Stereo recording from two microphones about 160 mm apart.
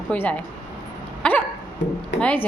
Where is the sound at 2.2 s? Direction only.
10° left (ahead or behind).